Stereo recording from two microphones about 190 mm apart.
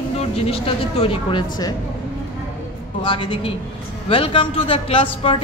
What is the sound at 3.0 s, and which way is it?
Speech, 25° left (ahead or behind).